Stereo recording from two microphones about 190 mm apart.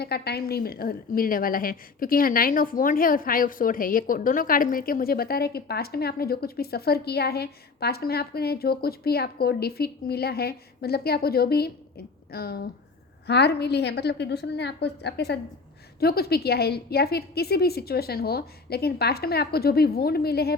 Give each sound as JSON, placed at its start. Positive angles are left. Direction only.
{"t": 0.0, "sound": "a woman's voice", "side_deg": 55}